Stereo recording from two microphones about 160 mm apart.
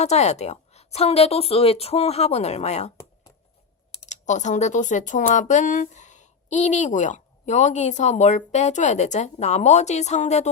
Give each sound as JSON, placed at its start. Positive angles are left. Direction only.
{"t": 0.0, "sound": "a woman's voice", "side_deg": 45}
{"t": 3.9, "sound": "speech", "side_deg": 50}